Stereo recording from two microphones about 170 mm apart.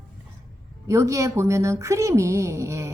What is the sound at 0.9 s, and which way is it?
Speech, 20° right (ahead or behind).